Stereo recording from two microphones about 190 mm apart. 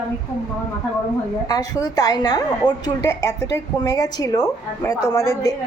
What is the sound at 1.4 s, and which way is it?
A woman's voice, 20° left (ahead or behind).